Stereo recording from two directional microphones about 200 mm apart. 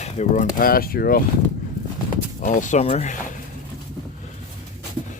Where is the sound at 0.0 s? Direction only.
40° left (ahead or behind).